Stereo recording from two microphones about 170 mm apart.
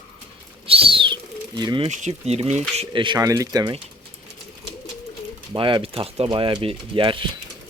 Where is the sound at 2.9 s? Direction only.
25° right (ahead or behind).